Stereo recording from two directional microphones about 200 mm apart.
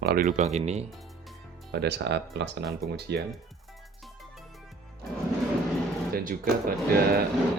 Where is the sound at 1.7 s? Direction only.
55° right (ahead or behind).